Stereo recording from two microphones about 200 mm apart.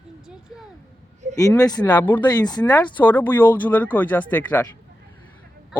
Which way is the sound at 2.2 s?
20° left (ahead or behind).